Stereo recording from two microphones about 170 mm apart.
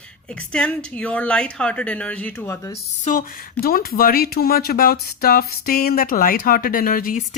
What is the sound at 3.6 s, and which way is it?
Speech, 60° left (ahead or behind).